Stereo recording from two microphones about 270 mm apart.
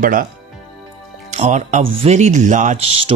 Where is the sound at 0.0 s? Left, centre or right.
Right.